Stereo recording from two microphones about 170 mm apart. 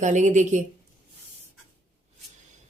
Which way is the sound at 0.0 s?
45° right (ahead or behind).